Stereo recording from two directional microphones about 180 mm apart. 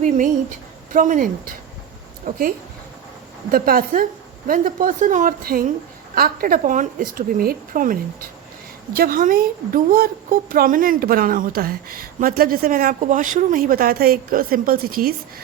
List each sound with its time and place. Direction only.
0.9 s a woman's voice: 45° right (ahead or behind)
3.5 s a woman's voice: 55° right (ahead or behind)